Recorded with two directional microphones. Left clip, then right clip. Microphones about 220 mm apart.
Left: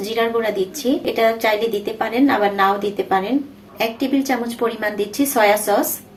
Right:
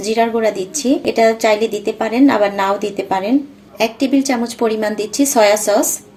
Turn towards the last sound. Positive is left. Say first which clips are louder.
# right 3 dB
turn(degrees=-30)  # may be behind; listen again after turning